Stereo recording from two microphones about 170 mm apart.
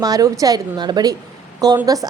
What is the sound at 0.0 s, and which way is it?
A woman's voice, 20° right (ahead or behind).